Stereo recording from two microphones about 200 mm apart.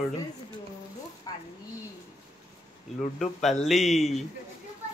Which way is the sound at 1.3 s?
20° left (ahead or behind).